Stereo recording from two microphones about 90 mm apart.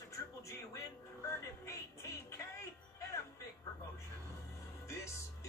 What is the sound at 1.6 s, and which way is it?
Music, 35° left (ahead or behind).